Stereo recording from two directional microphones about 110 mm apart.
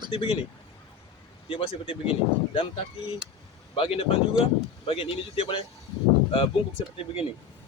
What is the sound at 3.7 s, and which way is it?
Speech, 60° left (ahead or behind).